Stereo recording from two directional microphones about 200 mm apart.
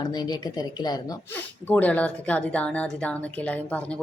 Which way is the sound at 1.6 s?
10° left (ahead or behind).